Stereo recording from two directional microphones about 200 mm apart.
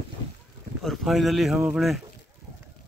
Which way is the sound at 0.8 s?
Centre (ahead or behind).